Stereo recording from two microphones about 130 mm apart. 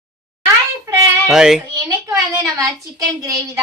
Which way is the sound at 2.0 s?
25° right (ahead or behind).